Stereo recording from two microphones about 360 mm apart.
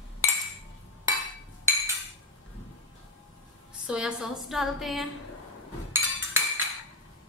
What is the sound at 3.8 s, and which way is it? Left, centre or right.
A woman's voice, centre.